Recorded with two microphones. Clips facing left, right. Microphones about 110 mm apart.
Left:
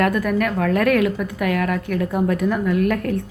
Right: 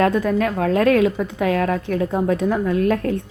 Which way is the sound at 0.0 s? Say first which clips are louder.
Right 1 dB; 25° right (ahead or behind).